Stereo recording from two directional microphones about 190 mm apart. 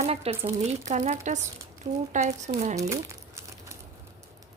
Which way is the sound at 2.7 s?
15° right (ahead or behind).